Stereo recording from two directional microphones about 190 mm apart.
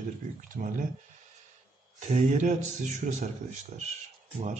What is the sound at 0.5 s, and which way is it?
Speech, 40° right (ahead or behind).